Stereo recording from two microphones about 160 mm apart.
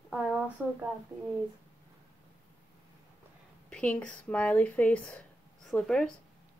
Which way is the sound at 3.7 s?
5° left (ahead or behind).